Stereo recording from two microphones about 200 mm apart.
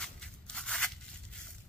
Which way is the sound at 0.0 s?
5° left (ahead or behind).